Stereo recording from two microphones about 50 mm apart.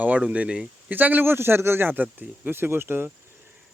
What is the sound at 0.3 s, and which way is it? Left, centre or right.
Speech, right.